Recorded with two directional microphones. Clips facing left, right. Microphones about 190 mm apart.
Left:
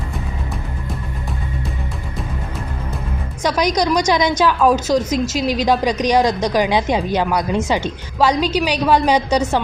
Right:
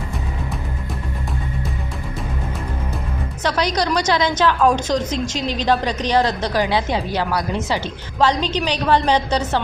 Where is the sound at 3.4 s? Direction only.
15° left (ahead or behind).